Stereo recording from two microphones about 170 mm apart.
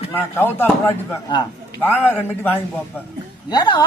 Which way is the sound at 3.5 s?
25° left (ahead or behind).